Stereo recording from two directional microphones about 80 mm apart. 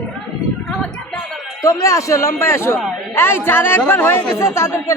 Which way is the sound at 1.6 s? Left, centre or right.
Left.